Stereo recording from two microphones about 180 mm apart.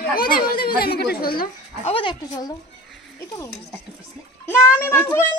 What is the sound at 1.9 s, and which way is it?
Speech, 25° left (ahead or behind).